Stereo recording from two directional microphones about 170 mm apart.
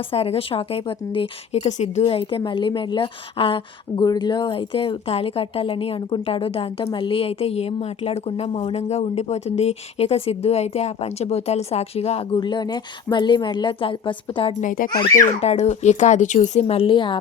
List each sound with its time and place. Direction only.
0.1 s a woman's voice: 35° left (ahead or behind)
14.6 s speech: 50° left (ahead or behind)
15.4 s a woman's voice: 40° left (ahead or behind)